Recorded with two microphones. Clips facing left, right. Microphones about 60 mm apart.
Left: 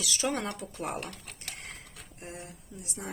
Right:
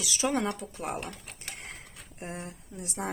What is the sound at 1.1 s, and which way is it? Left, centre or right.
Typing, centre.